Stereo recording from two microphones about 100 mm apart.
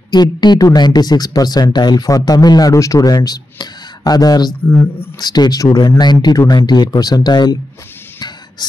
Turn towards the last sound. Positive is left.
turn(degrees=45)  # may be behind; listen again after turning